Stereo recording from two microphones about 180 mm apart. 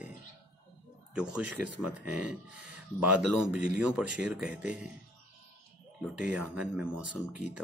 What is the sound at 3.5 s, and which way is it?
Speech, 5° right (ahead or behind).